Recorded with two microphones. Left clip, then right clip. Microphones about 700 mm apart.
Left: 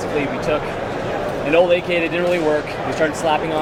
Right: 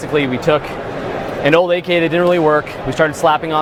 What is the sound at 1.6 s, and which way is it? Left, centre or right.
Speech, right.